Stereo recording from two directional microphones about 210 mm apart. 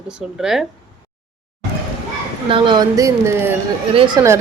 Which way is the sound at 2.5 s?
20° right (ahead or behind).